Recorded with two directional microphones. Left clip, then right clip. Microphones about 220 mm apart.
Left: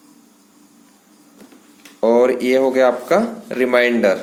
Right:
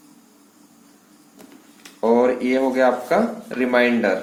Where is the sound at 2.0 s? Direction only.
45° left (ahead or behind).